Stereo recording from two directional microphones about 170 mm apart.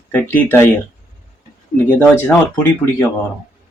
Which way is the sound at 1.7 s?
10° left (ahead or behind).